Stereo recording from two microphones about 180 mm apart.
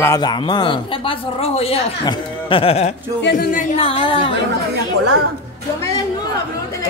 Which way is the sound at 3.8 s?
30° left (ahead or behind).